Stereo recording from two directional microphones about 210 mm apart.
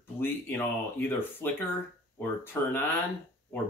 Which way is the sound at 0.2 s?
10° left (ahead or behind).